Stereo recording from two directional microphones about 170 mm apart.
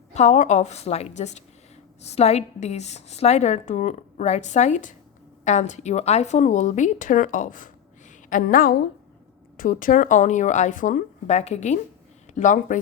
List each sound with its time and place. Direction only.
0.1 s a woman's voice: 40° left (ahead or behind)